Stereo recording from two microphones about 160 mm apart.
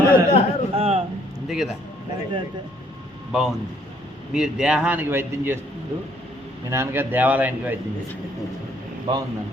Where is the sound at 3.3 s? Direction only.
5° right (ahead or behind).